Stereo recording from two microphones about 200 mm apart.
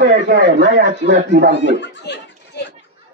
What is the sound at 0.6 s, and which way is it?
Speech, 55° right (ahead or behind).